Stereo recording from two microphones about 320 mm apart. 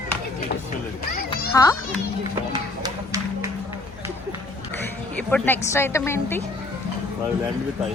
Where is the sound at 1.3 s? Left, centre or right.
Centre.